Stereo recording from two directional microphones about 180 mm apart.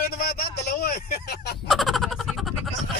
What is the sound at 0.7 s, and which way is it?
Speech, 60° left (ahead or behind).